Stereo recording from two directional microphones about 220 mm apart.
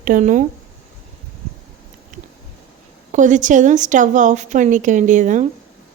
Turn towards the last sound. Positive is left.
turn(degrees=-35)  # may be behind; listen again after turning